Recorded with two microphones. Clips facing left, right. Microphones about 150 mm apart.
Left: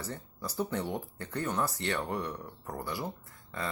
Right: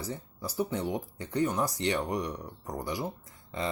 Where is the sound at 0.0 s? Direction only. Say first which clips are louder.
Right 2 dB; 10° right (ahead or behind).